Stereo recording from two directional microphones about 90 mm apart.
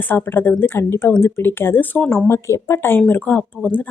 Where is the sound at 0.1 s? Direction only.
20° left (ahead or behind).